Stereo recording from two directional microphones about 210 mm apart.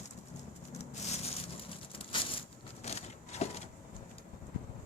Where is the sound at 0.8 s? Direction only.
30° left (ahead or behind).